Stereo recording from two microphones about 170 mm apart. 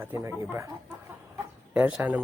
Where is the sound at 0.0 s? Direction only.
15° right (ahead or behind).